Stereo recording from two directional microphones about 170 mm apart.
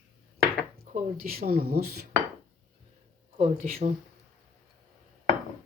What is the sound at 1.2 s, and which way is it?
Speech, 60° right (ahead or behind).